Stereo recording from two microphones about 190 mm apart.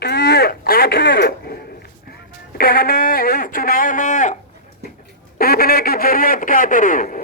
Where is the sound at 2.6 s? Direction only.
50° left (ahead or behind).